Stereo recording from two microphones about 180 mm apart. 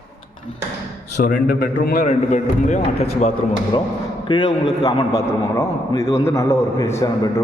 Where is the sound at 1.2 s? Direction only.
50° left (ahead or behind).